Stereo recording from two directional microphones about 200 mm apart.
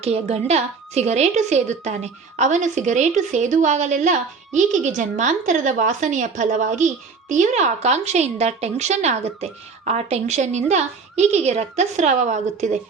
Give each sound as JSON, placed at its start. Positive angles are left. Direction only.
{"t": 0.0, "sound": "a woman's voice", "side_deg": -30}